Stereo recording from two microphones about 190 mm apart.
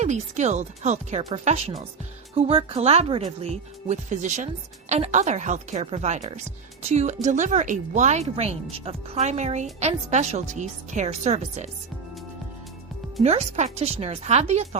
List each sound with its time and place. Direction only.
0.0 s speech: 40° right (ahead or behind)
13.2 s speech: 35° right (ahead or behind)